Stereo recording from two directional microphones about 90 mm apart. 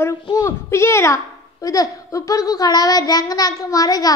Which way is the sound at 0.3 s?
35° left (ahead or behind).